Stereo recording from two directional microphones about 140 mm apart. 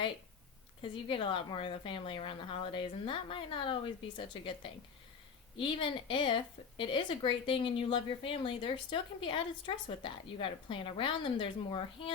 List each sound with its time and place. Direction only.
0.8 s a woman's voice: 35° left (ahead or behind)